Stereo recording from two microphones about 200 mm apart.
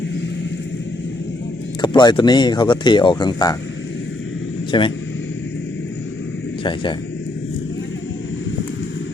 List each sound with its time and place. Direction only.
1.8 s speech: 20° left (ahead or behind)
4.7 s speech: 25° left (ahead or behind)
6.6 s speech: 25° left (ahead or behind)